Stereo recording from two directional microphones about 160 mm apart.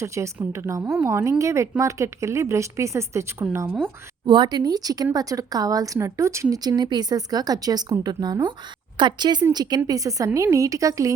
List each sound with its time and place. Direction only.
0.0 s a woman's voice: 15° right (ahead or behind)
4.3 s a woman's voice: 30° right (ahead or behind)